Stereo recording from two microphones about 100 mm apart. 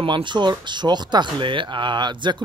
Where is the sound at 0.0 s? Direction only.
50° right (ahead or behind).